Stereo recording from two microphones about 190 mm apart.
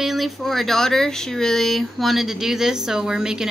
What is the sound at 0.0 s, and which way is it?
Speech, centre (ahead or behind).